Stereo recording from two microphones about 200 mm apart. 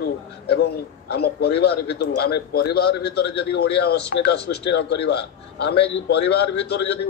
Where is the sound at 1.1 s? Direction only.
55° left (ahead or behind).